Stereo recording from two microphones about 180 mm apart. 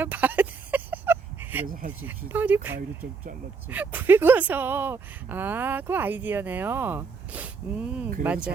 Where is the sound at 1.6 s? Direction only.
50° right (ahead or behind).